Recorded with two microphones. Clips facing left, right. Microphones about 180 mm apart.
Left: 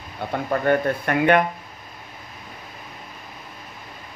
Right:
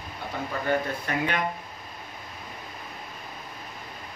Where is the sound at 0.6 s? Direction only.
60° left (ahead or behind).